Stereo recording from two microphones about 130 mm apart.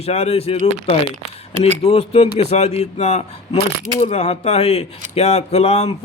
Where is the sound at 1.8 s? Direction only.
50° left (ahead or behind).